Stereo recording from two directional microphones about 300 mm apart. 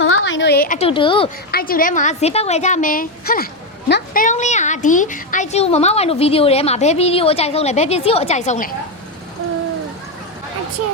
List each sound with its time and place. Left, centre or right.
0.0 s a woman's voice: left; by 1.3 s centre
1.5 s a woman's voice: left